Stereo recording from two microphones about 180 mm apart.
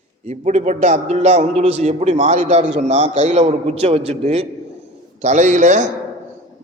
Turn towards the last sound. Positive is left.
turn(degrees=-40)  # may be behind; listen again after turning